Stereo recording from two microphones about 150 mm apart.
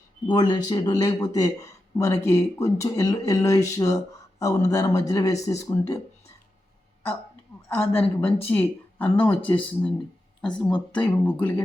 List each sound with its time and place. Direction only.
0.3 s speech: 30° left (ahead or behind)
7.7 s speech: 15° left (ahead or behind)